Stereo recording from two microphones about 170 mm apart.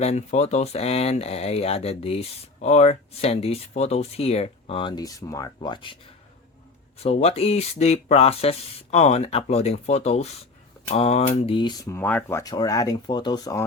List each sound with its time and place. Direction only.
0.0 s speech: 40° left (ahead or behind)
7.0 s speech: 40° left (ahead or behind); by 13.7 s 20° left (ahead or behind)